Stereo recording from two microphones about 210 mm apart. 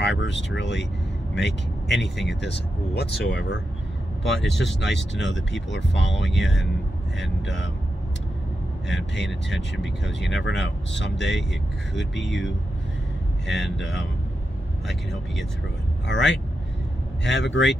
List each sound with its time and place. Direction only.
0.0 s vehicle: 60° left (ahead or behind)
0.6 s speech: 60° left (ahead or behind)
4.2 s speech: centre (ahead or behind)
4.7 s speech: 60° left (ahead or behind)
8.9 s speech: 55° left (ahead or behind)
13.5 s speech: centre (ahead or behind)
16.1 s speech: 60° left (ahead or behind)